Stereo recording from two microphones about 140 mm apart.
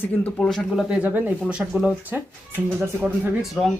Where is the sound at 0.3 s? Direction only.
5° left (ahead or behind).